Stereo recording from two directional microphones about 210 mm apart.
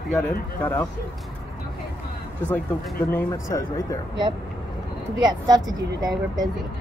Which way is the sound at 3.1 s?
10° left (ahead or behind).